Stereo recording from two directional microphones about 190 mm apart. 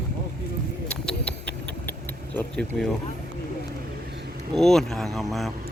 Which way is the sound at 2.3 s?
5° left (ahead or behind).